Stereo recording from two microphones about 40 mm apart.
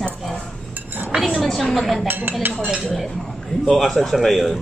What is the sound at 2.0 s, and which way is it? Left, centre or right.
Speech, right.